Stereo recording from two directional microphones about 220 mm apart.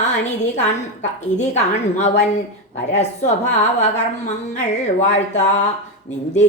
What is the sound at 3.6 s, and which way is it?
A woman's voice, 30° left (ahead or behind).